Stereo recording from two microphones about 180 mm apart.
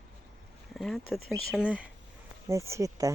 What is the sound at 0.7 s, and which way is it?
Speech, centre (ahead or behind).